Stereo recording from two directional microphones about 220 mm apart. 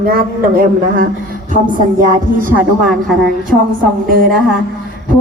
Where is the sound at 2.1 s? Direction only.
40° right (ahead or behind).